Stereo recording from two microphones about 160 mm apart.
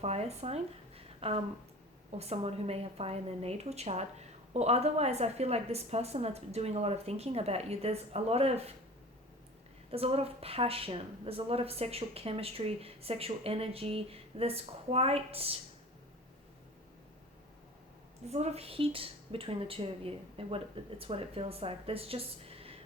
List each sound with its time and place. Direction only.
0.0 s a woman's voice: 40° right (ahead or behind)
9.9 s a woman's voice: 40° right (ahead or behind)
18.3 s a woman's voice: 45° right (ahead or behind)